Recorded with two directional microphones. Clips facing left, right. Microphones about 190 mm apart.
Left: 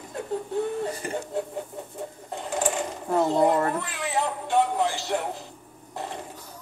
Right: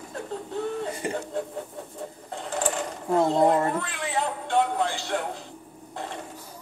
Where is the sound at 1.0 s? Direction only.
20° right (ahead or behind).